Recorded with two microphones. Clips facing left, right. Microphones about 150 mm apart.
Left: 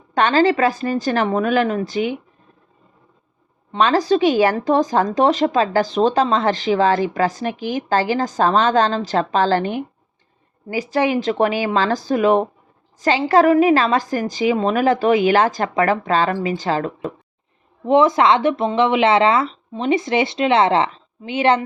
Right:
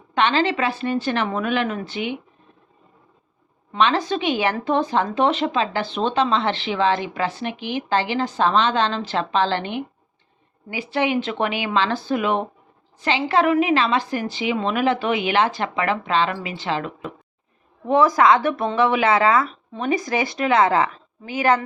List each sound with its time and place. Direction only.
0.1 s speech: 45° left (ahead or behind)
3.8 s speech: 40° left (ahead or behind)
17.8 s speech: 25° left (ahead or behind)